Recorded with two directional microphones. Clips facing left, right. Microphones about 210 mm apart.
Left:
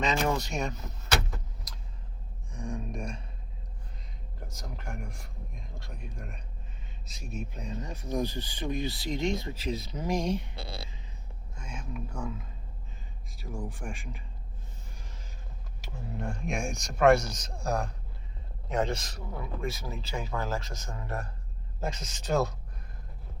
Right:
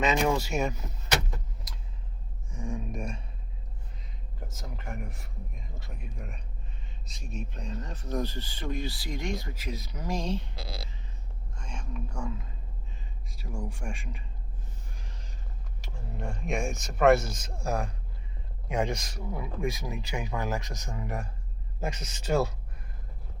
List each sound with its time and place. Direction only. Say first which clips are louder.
0.0 s speech: right 3 dB; 5° right (ahead or behind)
2.5 s a sound: right 1 dB; 5° right (ahead or behind)
4.4 s speech: right 1 dB; centre (ahead or behind); by 10.4 s 15° left (ahead or behind)
11.5 s speech: even; 5° left (ahead or behind)
15.8 s speech: left 2 dB; centre (ahead or behind)